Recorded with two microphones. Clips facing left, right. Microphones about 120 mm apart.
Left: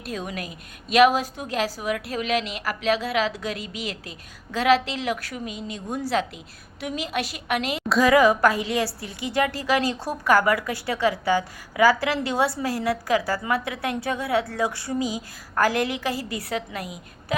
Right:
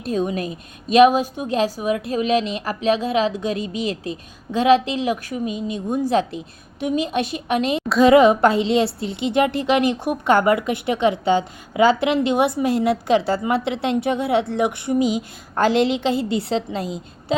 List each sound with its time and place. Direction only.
0.0 s a woman's voice: 25° right (ahead or behind)